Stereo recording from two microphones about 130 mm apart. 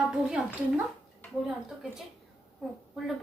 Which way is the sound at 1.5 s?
5° right (ahead or behind).